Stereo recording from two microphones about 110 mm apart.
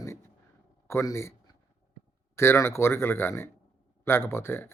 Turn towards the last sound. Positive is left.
turn(degrees=20)  # may be behind; listen again after turning